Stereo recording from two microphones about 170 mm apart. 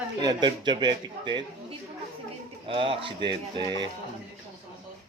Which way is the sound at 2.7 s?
30° right (ahead or behind).